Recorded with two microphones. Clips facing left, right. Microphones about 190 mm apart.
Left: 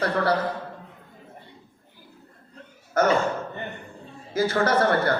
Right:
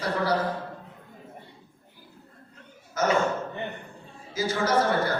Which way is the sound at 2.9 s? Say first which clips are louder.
Left 5 dB; 55° left (ahead or behind).